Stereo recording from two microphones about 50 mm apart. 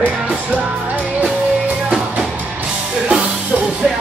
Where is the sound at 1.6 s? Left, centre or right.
Right.